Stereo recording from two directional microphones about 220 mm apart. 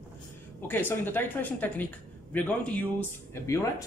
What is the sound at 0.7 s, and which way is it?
Speech, 10° left (ahead or behind).